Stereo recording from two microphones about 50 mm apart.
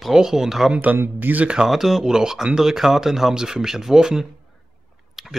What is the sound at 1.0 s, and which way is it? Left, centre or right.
Speech, right.